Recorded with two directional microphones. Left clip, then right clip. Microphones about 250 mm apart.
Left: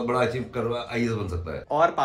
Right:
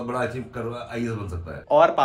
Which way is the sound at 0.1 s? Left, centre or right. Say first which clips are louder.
Left 2 dB; left.